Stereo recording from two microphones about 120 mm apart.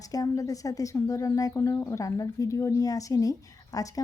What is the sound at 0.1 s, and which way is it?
Speech, 30° left (ahead or behind).